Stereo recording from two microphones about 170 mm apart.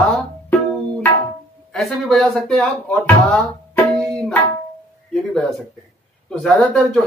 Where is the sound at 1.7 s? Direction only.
Centre (ahead or behind).